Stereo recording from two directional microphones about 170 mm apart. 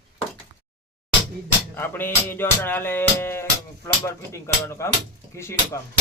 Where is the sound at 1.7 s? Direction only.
10° left (ahead or behind).